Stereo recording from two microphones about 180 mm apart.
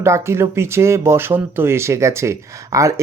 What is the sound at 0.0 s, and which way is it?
Speech, 15° right (ahead or behind).